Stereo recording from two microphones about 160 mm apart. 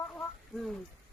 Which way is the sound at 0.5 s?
Centre (ahead or behind).